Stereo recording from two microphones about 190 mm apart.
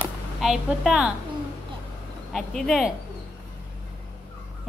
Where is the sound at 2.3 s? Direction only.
5° left (ahead or behind).